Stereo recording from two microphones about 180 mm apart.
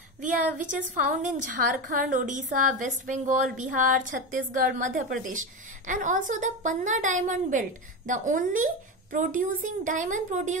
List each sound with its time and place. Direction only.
0.6 s a woman's voice: 45° right (ahead or behind)